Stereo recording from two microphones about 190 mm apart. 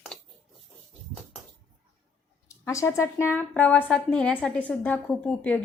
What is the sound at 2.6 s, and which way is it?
A woman's voice, 15° left (ahead or behind).